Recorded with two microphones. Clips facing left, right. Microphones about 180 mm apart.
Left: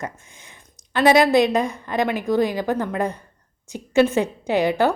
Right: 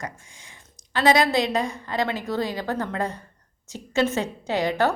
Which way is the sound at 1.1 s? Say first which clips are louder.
Left 5 dB; 20° left (ahead or behind).